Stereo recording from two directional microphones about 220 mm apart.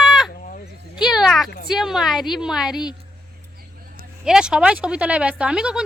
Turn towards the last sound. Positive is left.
turn(degrees=-5)  # may be behind; listen again after turning